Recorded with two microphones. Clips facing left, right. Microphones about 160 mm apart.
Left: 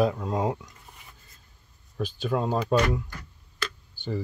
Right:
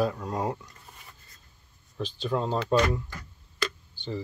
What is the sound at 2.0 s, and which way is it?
Speech, 10° left (ahead or behind).